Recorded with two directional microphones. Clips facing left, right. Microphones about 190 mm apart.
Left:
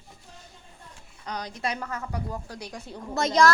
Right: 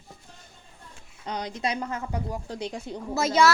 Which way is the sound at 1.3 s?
20° right (ahead or behind).